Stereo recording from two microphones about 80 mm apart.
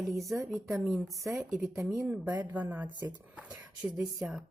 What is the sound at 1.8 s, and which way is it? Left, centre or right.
A woman's voice, centre.